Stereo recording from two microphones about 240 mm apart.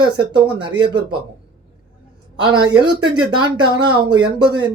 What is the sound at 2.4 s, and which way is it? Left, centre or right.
Speech, centre.